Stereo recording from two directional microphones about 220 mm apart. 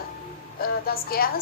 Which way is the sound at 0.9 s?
45° left (ahead or behind).